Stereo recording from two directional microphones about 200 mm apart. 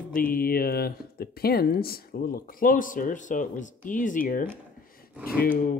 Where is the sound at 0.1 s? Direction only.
45° left (ahead or behind).